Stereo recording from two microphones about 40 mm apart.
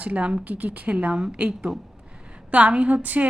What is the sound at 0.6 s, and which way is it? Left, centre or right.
Speech, right.